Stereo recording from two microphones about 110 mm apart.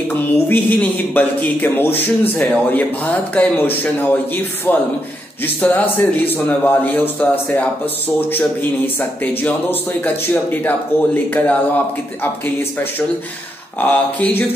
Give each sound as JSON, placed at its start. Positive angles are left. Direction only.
{"t": 0.1, "sound": "a man's voice", "side_deg": 15}
{"t": 13.7, "sound": "a man's voice", "side_deg": 15}